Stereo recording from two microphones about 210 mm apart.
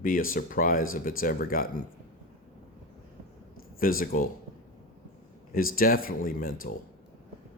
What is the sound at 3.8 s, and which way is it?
Speech, 45° left (ahead or behind).